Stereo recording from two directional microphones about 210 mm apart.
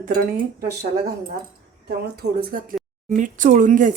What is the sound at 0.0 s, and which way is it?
Speech, 45° right (ahead or behind).